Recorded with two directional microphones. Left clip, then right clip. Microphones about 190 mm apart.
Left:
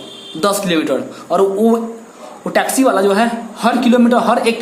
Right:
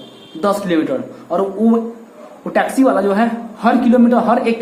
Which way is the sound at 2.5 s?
15° left (ahead or behind).